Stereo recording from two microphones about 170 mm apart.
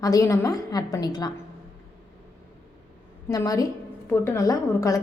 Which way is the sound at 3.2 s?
20° left (ahead or behind).